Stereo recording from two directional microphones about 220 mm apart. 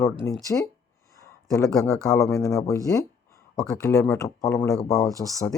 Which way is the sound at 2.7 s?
15° left (ahead or behind).